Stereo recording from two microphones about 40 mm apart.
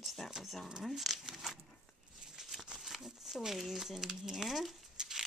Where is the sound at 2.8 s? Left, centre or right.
Centre.